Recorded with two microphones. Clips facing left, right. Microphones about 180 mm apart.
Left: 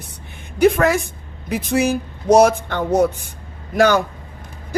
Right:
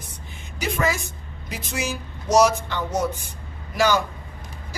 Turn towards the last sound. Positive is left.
turn(degrees=55)  # may be behind; listen again after turning